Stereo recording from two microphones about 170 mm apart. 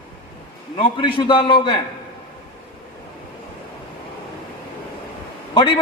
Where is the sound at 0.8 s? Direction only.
30° left (ahead or behind).